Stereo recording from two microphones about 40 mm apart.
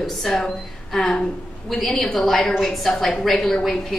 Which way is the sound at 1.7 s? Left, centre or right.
Centre.